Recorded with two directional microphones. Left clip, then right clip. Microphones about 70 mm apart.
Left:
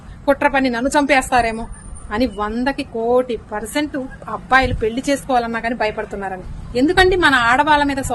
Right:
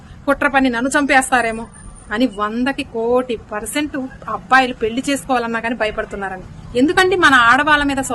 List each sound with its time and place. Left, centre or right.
0.3 s a woman's voice: right